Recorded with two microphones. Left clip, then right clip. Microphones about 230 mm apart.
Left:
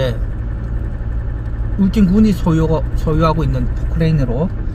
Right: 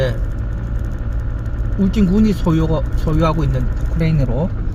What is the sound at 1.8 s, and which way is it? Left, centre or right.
Speech, centre.